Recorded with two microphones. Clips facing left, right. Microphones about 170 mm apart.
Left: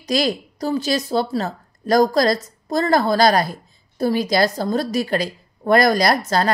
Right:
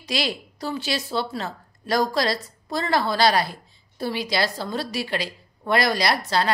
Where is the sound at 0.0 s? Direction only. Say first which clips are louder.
Left 7 dB; 45° left (ahead or behind).